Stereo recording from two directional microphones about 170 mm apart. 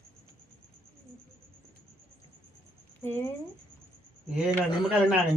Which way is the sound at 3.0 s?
15° left (ahead or behind).